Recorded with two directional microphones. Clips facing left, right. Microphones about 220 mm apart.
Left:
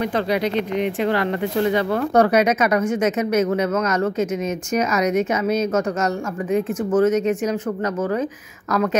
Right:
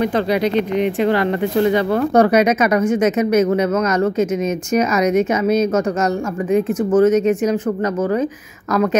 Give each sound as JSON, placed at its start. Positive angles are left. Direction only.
{"t": 0.0, "sound": "speech", "side_deg": -20}